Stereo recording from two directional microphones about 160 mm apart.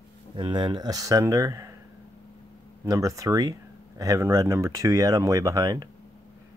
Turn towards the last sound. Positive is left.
turn(degrees=-25)  # may be behind; listen again after turning